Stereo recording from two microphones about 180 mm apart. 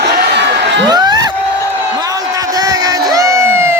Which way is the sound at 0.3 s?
75° right (ahead or behind).